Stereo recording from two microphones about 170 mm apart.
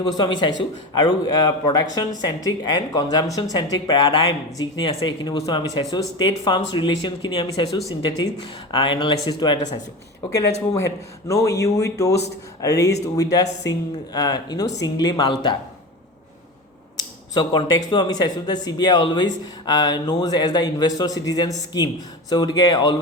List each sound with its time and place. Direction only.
0.0 s speech: 25° left (ahead or behind)
10.8 s speech: 15° left (ahead or behind)
17.3 s speech: 25° left (ahead or behind)